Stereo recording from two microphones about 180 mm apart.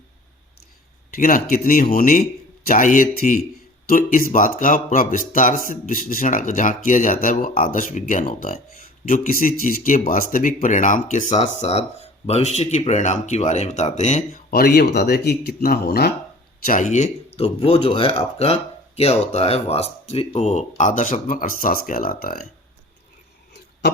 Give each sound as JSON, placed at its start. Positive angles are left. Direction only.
{"t": 1.1, "sound": "speech", "side_deg": 50}
{"t": 14.5, "sound": "speech", "side_deg": 55}
{"t": 16.6, "sound": "speech", "side_deg": 45}